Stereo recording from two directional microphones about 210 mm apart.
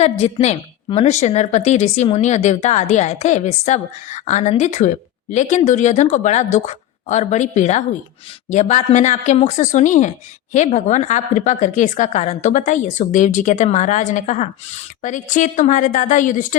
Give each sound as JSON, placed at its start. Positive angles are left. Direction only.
{"t": 0.0, "sound": "a woman's voice", "side_deg": 30}